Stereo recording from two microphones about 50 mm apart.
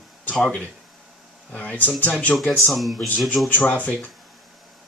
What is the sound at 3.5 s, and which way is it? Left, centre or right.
Speech, left.